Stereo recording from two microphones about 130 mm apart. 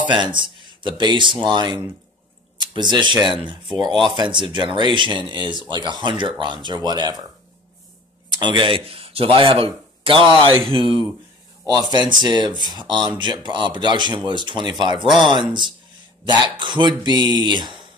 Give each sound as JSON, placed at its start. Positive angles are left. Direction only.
{"t": 0.0, "sound": "speech", "side_deg": -35}
{"t": 8.4, "sound": "speech", "side_deg": -40}